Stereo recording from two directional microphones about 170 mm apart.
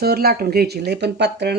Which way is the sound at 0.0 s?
65° right (ahead or behind).